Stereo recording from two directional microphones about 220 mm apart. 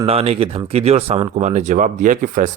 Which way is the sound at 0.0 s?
25° right (ahead or behind).